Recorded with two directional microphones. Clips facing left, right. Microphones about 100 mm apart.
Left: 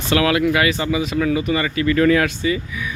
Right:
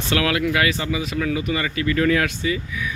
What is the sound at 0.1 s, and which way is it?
Speech, 20° left (ahead or behind).